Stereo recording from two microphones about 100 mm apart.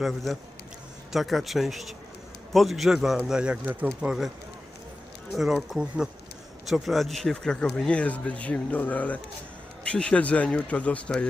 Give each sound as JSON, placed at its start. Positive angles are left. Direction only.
{"t": 0.0, "sound": "speech", "side_deg": 0}
{"t": 5.3, "sound": "speech", "side_deg": 0}